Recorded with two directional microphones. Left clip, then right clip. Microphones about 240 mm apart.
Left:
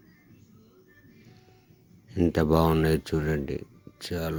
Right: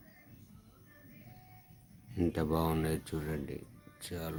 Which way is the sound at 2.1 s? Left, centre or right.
Left.